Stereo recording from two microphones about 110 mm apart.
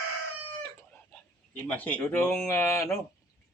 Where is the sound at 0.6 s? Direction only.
20° left (ahead or behind).